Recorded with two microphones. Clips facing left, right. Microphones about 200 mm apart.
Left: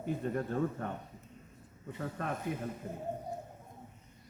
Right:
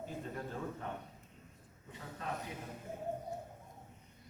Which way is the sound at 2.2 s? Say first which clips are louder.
Left 4 dB; 55° left (ahead or behind).